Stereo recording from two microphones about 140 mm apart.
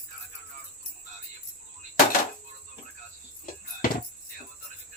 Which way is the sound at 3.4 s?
85° left.